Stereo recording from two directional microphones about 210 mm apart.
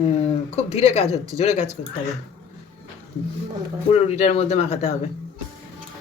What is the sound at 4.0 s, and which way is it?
Speech, 30° left (ahead or behind).